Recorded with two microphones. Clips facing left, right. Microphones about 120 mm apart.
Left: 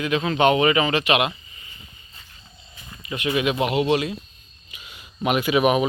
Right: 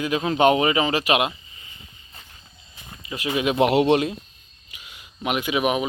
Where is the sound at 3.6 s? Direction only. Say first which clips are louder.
Right 7 dB; 60° right (ahead or behind).